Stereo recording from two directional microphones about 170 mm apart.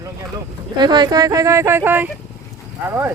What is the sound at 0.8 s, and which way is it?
Speech, 25° right (ahead or behind).